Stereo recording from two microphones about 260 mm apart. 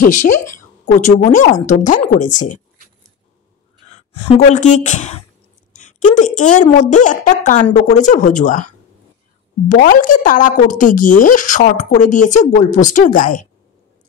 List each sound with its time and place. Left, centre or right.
0.0 s a woman's voice: left
3.9 s a woman's voice: left
9.7 s speech: left